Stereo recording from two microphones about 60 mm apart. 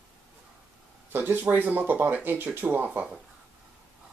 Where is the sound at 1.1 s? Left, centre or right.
Right.